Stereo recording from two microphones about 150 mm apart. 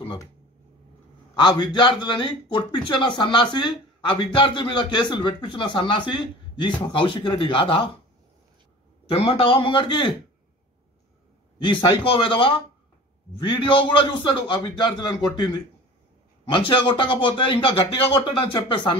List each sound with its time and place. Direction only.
1.3 s a man's voice: 30° left (ahead or behind)
9.1 s a man's voice: 40° left (ahead or behind)
11.6 s a man's voice: 30° left (ahead or behind)